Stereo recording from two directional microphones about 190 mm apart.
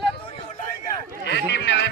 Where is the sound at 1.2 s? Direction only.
65° left (ahead or behind).